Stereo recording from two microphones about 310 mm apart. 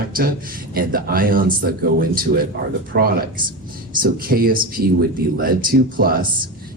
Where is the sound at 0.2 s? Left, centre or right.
Right.